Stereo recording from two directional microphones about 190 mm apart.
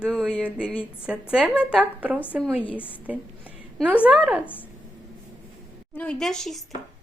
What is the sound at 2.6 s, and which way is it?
Speech, 10° left (ahead or behind).